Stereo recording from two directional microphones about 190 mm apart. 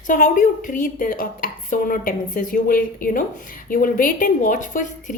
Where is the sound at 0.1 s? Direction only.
45° left (ahead or behind).